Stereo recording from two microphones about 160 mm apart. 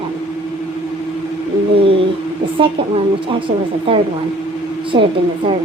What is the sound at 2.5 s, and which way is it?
Speech, 35° right (ahead or behind).